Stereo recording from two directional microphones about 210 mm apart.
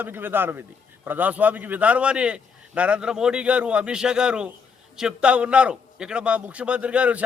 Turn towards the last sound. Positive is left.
turn(degrees=-5)  # may be behind; listen again after turning